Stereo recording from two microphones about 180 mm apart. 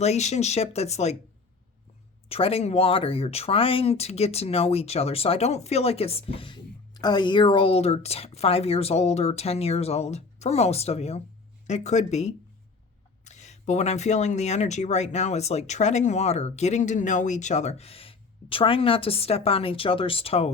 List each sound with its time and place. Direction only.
0.0 s speech: 40° left (ahead or behind)
2.3 s speech: 35° left (ahead or behind)